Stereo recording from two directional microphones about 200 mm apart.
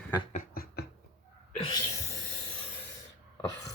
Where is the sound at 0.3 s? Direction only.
50° left (ahead or behind).